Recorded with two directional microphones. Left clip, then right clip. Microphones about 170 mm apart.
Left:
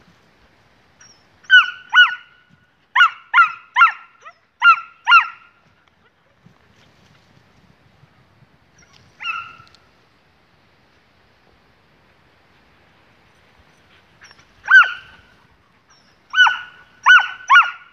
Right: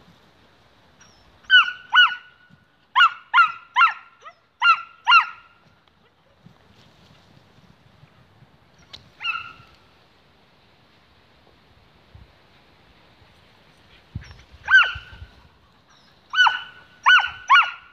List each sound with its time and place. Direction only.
1.5 s a sound: 5° left (ahead or behind)
2.9 s dog: centre (ahead or behind)
14.2 s dog: 15° right (ahead or behind)
16.3 s fowl: centre (ahead or behind)
17.0 s dog: centre (ahead or behind)